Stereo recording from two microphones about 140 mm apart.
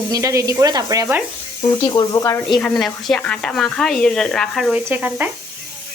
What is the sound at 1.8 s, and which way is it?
Speech, 30° left (ahead or behind).